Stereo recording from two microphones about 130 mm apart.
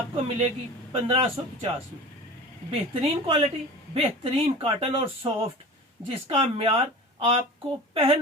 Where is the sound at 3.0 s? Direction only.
40° right (ahead or behind).